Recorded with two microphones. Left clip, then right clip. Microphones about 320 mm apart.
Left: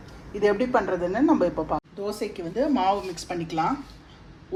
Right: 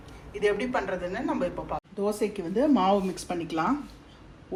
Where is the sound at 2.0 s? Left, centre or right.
Right.